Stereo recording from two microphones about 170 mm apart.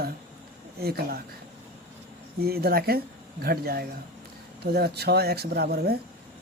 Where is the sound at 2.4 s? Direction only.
65° right (ahead or behind).